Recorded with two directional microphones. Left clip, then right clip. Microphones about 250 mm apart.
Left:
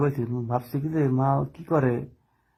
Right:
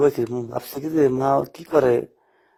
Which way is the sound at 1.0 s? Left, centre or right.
Right.